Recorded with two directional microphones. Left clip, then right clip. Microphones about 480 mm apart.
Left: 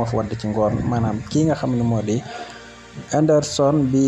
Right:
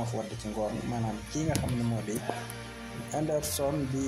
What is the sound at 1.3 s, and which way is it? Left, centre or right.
Speech, right.